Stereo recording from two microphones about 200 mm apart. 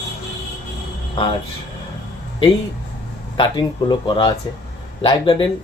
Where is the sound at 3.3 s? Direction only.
25° left (ahead or behind).